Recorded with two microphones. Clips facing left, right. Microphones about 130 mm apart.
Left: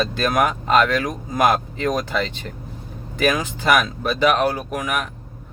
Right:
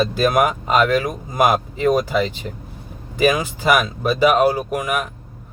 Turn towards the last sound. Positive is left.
turn(degrees=-5)  # may be behind; listen again after turning